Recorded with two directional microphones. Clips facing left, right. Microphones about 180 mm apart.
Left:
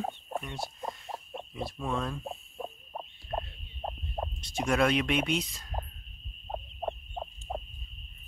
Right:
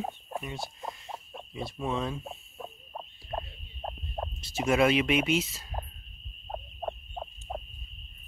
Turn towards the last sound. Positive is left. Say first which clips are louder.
# left 1 dB
turn(degrees=5)  # may be behind; listen again after turning